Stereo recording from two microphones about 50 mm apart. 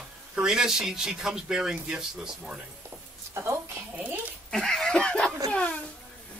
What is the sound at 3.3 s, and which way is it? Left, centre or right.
Speech, right.